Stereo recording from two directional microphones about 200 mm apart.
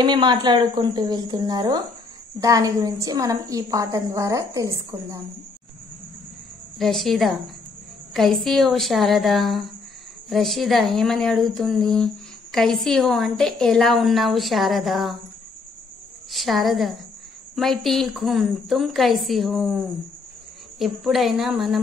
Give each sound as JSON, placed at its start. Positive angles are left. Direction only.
{"t": 0.0, "sound": "a woman's voice", "side_deg": -20}
{"t": 6.8, "sound": "a woman's voice", "side_deg": 0}
{"t": 16.3, "sound": "a woman's voice", "side_deg": 0}
{"t": 20.8, "sound": "a woman's voice", "side_deg": 0}